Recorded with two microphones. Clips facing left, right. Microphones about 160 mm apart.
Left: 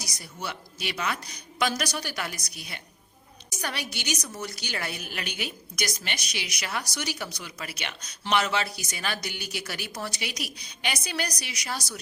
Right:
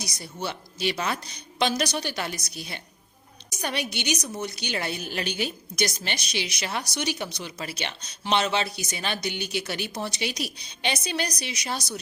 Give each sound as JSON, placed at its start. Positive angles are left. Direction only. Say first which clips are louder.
{"t": 0.0, "sound": "a woman's voice", "louder": "right 4 dB", "side_deg": -30}